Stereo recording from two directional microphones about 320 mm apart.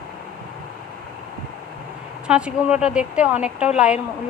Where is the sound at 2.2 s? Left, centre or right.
Centre.